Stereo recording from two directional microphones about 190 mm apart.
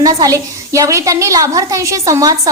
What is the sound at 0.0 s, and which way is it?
A woman's voice, 20° right (ahead or behind).